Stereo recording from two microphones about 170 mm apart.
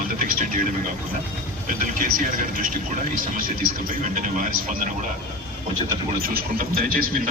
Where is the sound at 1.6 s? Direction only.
50° right (ahead or behind).